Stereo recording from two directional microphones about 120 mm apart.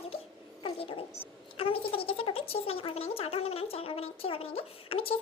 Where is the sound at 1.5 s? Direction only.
50° left (ahead or behind).